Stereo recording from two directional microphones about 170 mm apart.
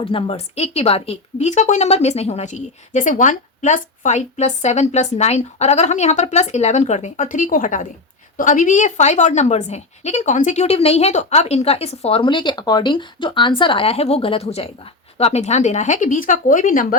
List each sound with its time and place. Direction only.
0.0 s a woman's voice: 35° left (ahead or behind); by 17.0 s 50° left (ahead or behind)